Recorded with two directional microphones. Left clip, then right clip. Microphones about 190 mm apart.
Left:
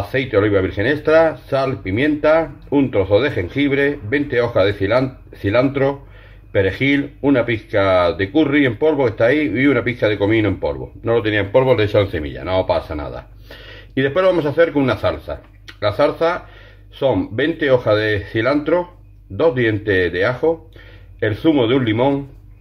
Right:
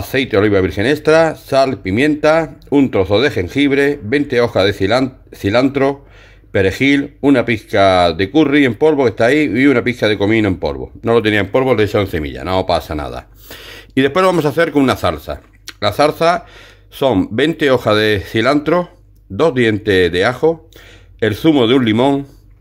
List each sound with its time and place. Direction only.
0.1 s speech: 55° right (ahead or behind)